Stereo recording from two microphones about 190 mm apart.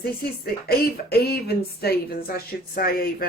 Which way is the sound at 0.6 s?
55° left (ahead or behind).